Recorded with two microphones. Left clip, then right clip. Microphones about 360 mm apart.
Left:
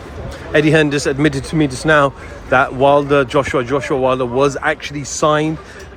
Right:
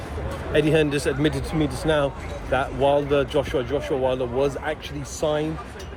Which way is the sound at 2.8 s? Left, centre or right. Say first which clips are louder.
Left 7 dB; left.